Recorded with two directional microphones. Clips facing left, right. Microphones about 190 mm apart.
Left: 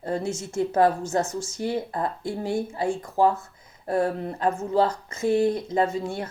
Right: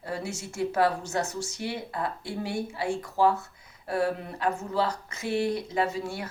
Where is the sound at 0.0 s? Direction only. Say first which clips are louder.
Left 6 dB; 50° left (ahead or behind).